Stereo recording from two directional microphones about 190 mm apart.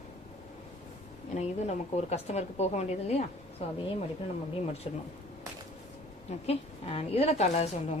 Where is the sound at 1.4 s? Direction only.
35° left (ahead or behind).